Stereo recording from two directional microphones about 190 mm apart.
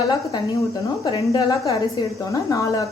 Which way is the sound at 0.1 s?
20° left (ahead or behind).